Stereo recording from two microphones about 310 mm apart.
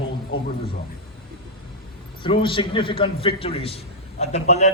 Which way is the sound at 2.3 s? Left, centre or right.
Centre.